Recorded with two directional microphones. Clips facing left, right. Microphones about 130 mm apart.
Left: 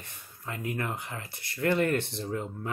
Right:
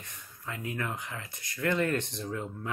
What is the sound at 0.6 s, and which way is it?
Speech, 40° left (ahead or behind).